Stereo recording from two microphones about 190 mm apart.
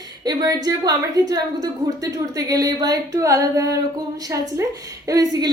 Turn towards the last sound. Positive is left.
turn(degrees=-20)  # may be behind; listen again after turning